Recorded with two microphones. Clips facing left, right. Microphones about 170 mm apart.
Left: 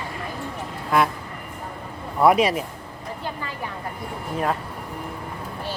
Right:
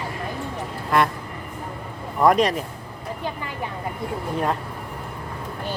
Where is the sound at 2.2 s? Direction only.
5° left (ahead or behind).